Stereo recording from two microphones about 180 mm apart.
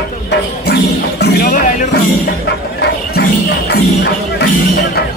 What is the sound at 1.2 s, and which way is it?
Music, 50° left (ahead or behind).